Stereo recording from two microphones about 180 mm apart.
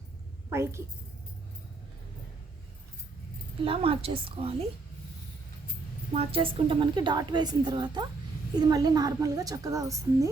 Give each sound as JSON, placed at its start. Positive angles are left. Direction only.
{"t": 0.5, "sound": "a woman's voice", "side_deg": -15}
{"t": 3.6, "sound": "a woman's voice", "side_deg": -30}
{"t": 6.1, "sound": "a woman's voice", "side_deg": -30}